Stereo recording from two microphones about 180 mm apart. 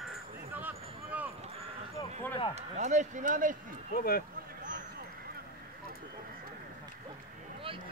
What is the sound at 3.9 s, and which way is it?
Speech, 55° left (ahead or behind).